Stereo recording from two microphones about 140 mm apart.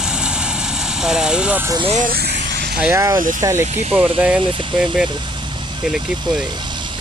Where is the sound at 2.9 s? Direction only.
25° right (ahead or behind).